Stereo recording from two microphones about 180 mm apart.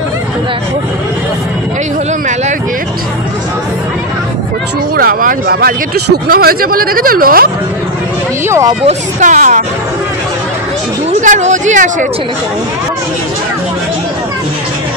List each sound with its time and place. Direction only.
4.9 s speech: 55° right (ahead or behind)
8.5 s speech: 15° right (ahead or behind)
8.8 s speech: 45° right (ahead or behind)
11.1 s speech: 40° right (ahead or behind)